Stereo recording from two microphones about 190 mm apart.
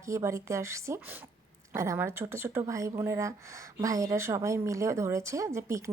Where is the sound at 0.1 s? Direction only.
15° right (ahead or behind).